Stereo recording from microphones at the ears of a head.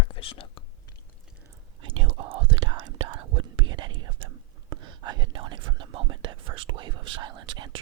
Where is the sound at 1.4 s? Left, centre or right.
Right.